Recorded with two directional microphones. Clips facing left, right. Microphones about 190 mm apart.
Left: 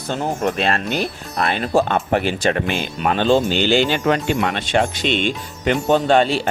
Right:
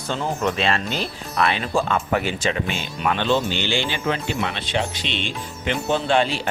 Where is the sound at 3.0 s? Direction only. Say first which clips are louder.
Left 4 dB; 40° left (ahead or behind).